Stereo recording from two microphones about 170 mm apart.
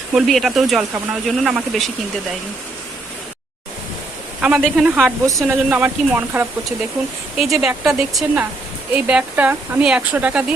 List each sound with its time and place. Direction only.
0.1 s speech: centre (ahead or behind)
4.4 s speech: 5° right (ahead or behind)